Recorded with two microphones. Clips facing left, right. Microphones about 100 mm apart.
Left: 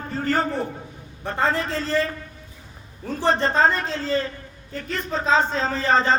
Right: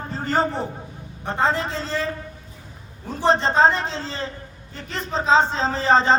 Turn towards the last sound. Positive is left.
turn(degrees=-25)  # may be behind; listen again after turning